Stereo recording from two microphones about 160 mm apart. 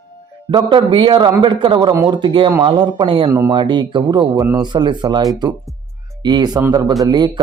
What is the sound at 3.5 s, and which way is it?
A man's voice, 30° right (ahead or behind).